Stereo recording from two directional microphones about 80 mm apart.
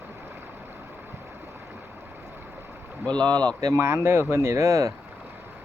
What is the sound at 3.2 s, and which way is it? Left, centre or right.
Speech, right.